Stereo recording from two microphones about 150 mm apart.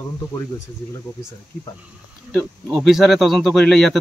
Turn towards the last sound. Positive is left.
turn(degrees=0)  # may be behind; listen again after turning